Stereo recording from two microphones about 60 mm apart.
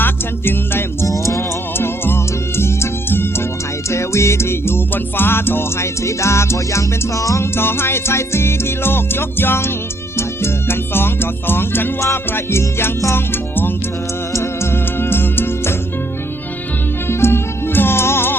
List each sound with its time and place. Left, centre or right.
0.0 s music: left
1.0 s music: left
3.8 s music: left
6.0 s music: left
7.5 s music: left
17.1 s music: left